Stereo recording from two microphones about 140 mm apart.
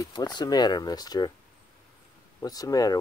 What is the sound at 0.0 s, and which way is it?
Speech, 30° left (ahead or behind).